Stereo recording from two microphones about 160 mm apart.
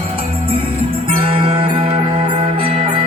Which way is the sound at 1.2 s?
35° right (ahead or behind).